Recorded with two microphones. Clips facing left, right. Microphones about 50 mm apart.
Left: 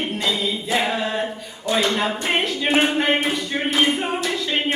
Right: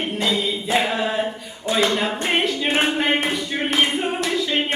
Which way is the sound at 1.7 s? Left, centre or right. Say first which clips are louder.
Even; right.